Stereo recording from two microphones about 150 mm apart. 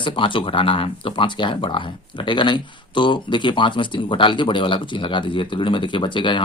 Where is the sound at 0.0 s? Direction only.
35° left (ahead or behind).